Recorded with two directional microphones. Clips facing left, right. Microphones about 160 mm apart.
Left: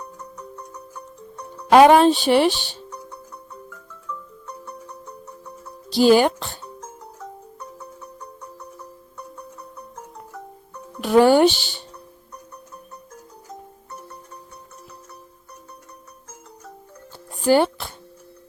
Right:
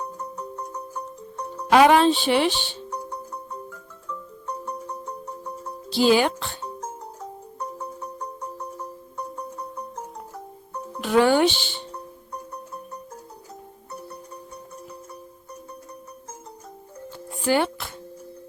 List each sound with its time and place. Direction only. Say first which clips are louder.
0.3 s music: right 4 dB; 30° right (ahead or behind)
1.7 s speech: left 4 dB; 45° left (ahead or behind)
4.4 s music: right 7 dB; 30° right (ahead or behind)
5.9 s speech: left 4 dB; 45° left (ahead or behind)
11.0 s speech: left 4 dB; 40° left (ahead or behind)
17.4 s speech: left 5 dB; 35° left (ahead or behind)